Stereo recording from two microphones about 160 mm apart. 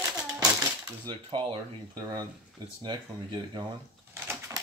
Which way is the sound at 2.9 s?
25° right (ahead or behind).